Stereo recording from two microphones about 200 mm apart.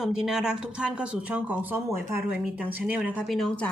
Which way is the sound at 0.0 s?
5° right (ahead or behind).